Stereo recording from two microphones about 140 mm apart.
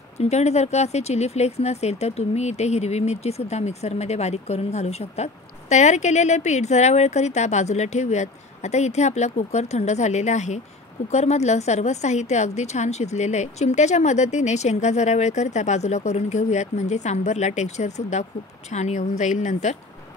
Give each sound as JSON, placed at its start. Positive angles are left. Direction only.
{"t": 0.2, "sound": "speech", "side_deg": 50}